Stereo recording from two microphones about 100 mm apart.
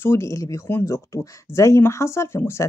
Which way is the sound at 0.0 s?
25° left (ahead or behind).